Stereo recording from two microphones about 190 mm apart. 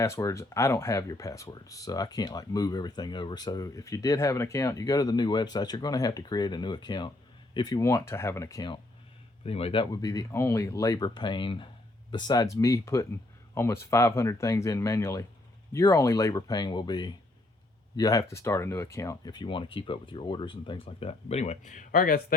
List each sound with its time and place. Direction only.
0.0 s speech: 15° left (ahead or behind)
9.4 s speech: 30° left (ahead or behind); by 22.4 s 50° left (ahead or behind)